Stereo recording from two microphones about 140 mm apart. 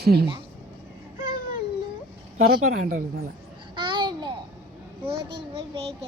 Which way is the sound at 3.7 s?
35° right (ahead or behind).